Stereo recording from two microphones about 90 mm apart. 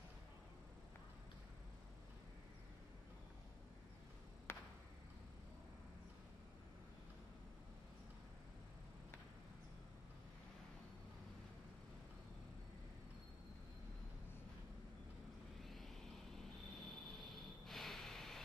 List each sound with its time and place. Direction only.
4.5 s a sound: 25° left (ahead or behind)
15.6 s vehicle: centre (ahead or behind)
16.7 s snort: centre (ahead or behind)